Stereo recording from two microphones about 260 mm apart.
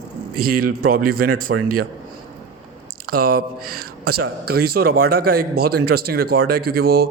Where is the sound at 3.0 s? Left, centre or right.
Right.